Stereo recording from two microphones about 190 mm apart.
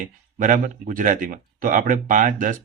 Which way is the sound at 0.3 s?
45° right (ahead or behind).